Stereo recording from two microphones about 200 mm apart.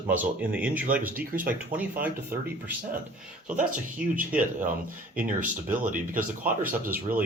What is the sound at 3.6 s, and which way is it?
Speech, 40° right (ahead or behind).